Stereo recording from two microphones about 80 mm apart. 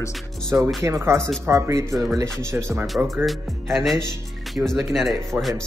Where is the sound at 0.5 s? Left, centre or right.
Right.